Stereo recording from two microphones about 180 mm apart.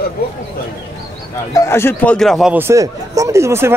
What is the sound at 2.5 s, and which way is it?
Speech, 15° right (ahead or behind).